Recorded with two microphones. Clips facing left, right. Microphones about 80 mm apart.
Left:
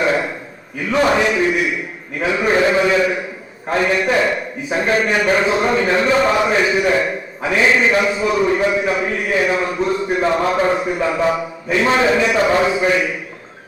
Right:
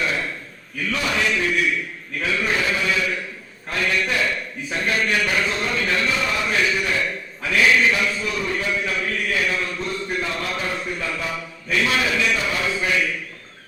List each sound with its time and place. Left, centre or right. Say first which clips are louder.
0.9 s a sound: left 9 dB; left
4.7 s a man's voice: left 6 dB; left
10.8 s speech: left 8 dB; centre
11.0 s a man's voice: left 11 dB; left
12.4 s a sound: left 11 dB; left
12.8 s a man's voice: left 6 dB; left